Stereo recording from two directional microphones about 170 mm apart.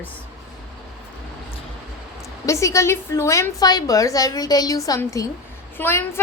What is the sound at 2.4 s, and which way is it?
A woman's voice, 15° left (ahead or behind).